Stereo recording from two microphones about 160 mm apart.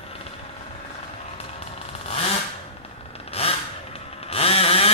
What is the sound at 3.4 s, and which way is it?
Vehicle, 40° left (ahead or behind).